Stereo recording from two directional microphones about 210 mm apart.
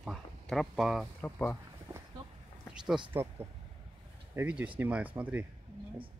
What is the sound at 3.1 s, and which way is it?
Speech, 10° right (ahead or behind).